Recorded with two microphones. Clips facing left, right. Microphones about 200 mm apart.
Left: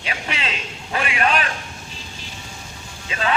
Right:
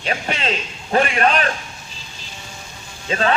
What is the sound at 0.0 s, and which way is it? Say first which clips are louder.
A man's voice: right 5 dB; 40° right (ahead or behind).